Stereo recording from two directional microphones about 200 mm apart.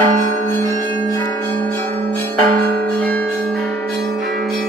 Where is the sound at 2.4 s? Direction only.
45° right (ahead or behind).